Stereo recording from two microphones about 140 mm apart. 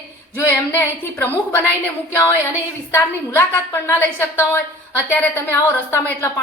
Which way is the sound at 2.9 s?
15° left (ahead or behind).